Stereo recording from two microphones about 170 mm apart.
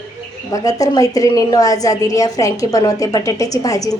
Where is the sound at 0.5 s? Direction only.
20° left (ahead or behind).